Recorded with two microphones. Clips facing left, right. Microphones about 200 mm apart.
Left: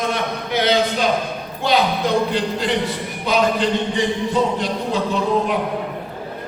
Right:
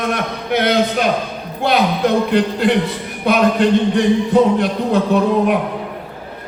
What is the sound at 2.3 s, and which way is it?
A man's voice, 60° right (ahead or behind).